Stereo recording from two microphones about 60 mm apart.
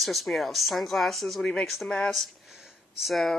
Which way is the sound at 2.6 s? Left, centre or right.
Centre.